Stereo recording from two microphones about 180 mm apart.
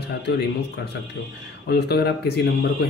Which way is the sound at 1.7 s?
65° left (ahead or behind).